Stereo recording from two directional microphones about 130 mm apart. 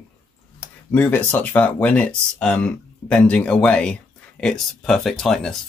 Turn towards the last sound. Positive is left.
turn(degrees=5)  # may be behind; listen again after turning